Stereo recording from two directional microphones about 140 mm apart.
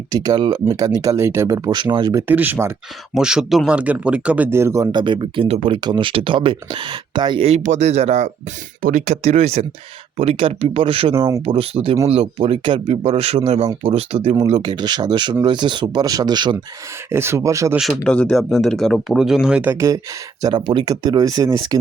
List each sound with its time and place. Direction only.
0.1 s speech: 30° right (ahead or behind)
1.8 s speech: 35° right (ahead or behind)
2.2 s speech: 15° right (ahead or behind)
3.2 s speech: 5° right (ahead or behind); by 7.6 s 40° right (ahead or behind)
7.6 s speech: 55° right (ahead or behind)
8.8 s speech: 65° right (ahead or behind); by 11.1 s 40° right (ahead or behind)
11.1 s speech: 20° right (ahead or behind)
11.4 s speech: 45° right (ahead or behind)
14.7 s speech: 30° right (ahead or behind)
17.1 s speech: 20° right (ahead or behind)
17.7 s speech: centre (ahead or behind)
20.4 s speech: 35° right (ahead or behind)